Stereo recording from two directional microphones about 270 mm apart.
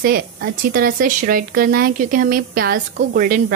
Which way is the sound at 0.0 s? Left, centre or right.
Right.